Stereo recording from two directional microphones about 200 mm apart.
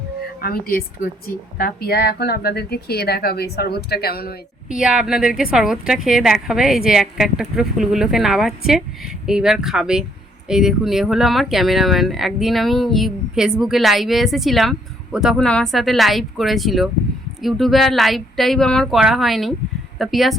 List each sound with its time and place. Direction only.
0.4 s speech: 50° left (ahead or behind)
4.7 s speech: 5° right (ahead or behind)